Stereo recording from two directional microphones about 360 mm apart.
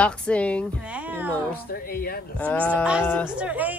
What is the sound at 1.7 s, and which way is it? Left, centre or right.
Speech, left.